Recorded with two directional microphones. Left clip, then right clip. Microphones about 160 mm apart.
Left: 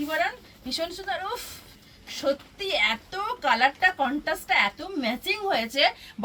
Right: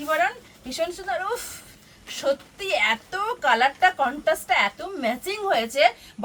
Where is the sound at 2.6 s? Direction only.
25° right (ahead or behind).